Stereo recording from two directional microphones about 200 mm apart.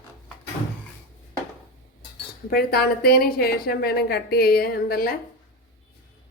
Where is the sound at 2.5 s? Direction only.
50° left (ahead or behind).